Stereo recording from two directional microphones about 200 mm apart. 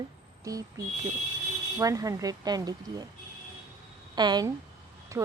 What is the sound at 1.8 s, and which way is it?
Speech, 15° right (ahead or behind).